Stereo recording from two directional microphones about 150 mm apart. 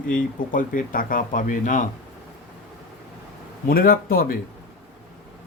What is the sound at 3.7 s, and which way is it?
Speech, 80° left.